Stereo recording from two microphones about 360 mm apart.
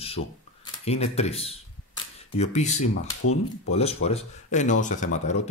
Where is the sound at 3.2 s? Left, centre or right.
Left.